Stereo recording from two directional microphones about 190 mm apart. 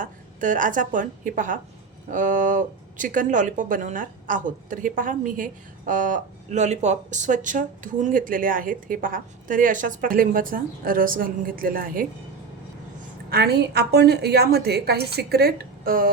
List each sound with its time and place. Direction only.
0.0 s a woman's voice: 45° right (ahead or behind)
13.3 s a woman's voice: 60° right (ahead or behind)